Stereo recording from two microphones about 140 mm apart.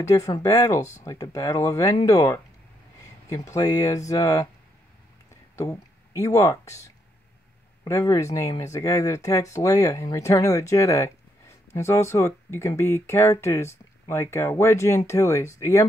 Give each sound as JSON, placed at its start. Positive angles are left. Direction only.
{"t": 0.0, "sound": "speech", "side_deg": 25}
{"t": 5.3, "sound": "a sound", "side_deg": 20}
{"t": 7.8, "sound": "speech", "side_deg": 20}